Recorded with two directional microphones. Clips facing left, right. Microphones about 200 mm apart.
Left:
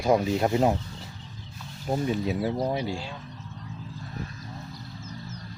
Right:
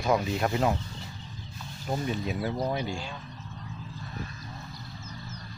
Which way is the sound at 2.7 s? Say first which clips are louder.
Left 2 dB; 25° left (ahead or behind).